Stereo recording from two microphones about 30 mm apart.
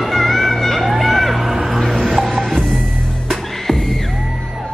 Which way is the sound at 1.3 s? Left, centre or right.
Centre.